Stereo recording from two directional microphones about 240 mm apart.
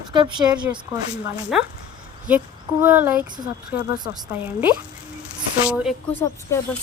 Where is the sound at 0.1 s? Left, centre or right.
Centre.